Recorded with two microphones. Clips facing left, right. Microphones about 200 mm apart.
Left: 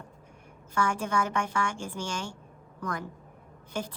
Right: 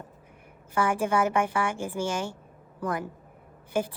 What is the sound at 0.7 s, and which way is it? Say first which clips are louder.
A woman's voice: right 4 dB; 10° right (ahead or behind).